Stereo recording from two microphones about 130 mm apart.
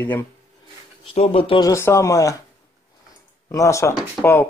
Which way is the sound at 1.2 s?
45° left (ahead or behind).